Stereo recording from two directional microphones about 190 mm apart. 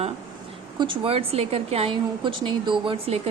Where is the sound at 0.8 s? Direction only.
25° right (ahead or behind).